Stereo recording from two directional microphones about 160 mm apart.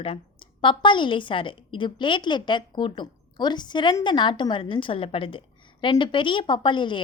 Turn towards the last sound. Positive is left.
turn(degrees=30)  # may be behind; listen again after turning